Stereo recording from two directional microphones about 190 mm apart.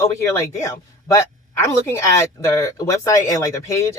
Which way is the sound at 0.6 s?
15° left (ahead or behind).